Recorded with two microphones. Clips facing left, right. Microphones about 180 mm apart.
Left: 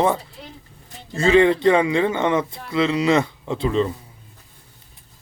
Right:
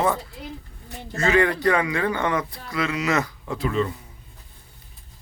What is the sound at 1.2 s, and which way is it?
A man's voice, 25° left (ahead or behind).